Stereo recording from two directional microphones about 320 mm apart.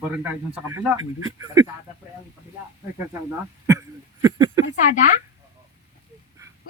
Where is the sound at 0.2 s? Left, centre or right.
Centre.